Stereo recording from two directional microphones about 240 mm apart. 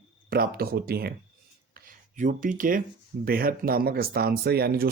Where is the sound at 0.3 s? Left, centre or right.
Right.